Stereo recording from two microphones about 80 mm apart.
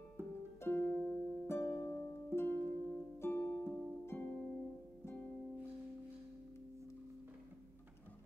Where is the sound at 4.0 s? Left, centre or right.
Left.